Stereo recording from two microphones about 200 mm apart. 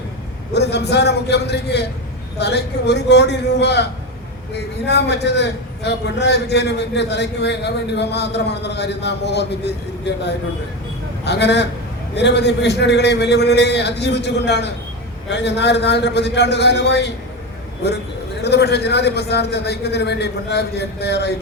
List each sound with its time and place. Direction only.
0.5 s a man's voice: 55° left (ahead or behind)
4.9 s a man's voice: 60° left (ahead or behind)
11.3 s a man's voice: 55° left (ahead or behind)
18.4 s a man's voice: 55° left (ahead or behind)